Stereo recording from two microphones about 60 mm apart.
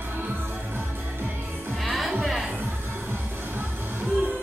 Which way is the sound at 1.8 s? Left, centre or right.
Centre.